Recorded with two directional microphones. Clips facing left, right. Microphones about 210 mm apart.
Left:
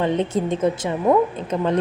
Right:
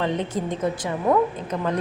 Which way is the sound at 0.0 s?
25° left (ahead or behind).